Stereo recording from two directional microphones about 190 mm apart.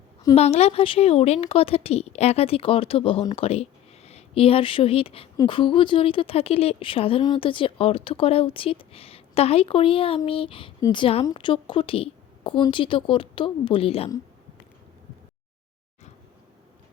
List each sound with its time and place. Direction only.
0.3 s a woman's voice: 35° left (ahead or behind)